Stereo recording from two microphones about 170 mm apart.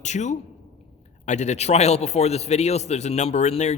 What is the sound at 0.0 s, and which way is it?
A man's voice, 45° left (ahead or behind).